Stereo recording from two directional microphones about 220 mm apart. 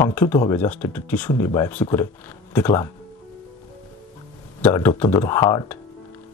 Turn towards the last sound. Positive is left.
turn(degrees=15)  # may be behind; listen again after turning